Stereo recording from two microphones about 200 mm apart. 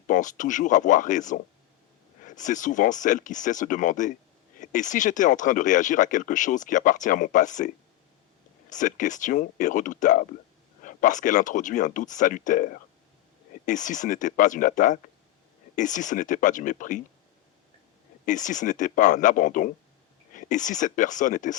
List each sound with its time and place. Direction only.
0.1 s speech: 40° left (ahead or behind)
8.7 s speech: 40° left (ahead or behind)
18.3 s speech: 40° left (ahead or behind)